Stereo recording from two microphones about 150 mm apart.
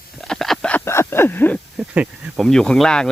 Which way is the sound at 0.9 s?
15° left (ahead or behind).